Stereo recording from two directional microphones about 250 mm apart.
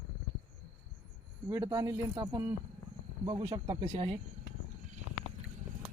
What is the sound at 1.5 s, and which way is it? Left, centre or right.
Speech, centre.